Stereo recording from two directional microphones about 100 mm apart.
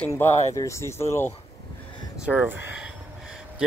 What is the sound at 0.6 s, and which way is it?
Speech, 30° left (ahead or behind).